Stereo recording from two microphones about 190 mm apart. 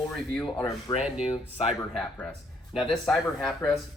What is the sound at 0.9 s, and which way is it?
Speech, 20° left (ahead or behind).